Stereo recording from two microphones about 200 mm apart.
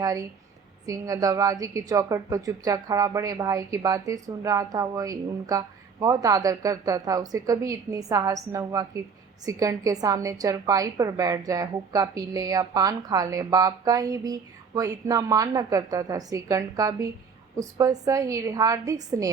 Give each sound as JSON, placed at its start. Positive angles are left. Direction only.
{"t": 0.0, "sound": "a woman's voice", "side_deg": -20}